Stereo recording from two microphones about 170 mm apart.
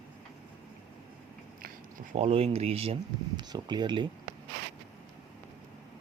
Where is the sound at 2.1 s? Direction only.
35° right (ahead or behind).